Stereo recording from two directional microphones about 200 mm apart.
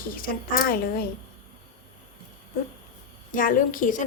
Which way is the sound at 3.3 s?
45° left (ahead or behind).